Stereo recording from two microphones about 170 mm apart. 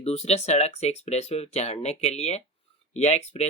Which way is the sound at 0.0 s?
40° left (ahead or behind).